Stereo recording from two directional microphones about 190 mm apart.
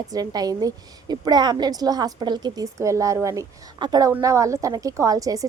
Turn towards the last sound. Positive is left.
turn(degrees=-20)  # may be behind; listen again after turning